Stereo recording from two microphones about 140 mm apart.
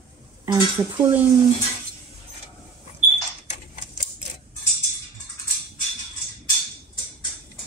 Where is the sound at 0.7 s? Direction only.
15° right (ahead or behind).